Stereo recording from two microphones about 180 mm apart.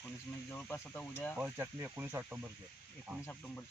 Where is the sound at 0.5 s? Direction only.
10° left (ahead or behind).